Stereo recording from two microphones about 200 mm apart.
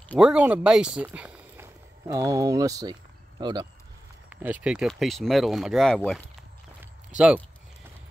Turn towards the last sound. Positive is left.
turn(degrees=-5)  # may be behind; listen again after turning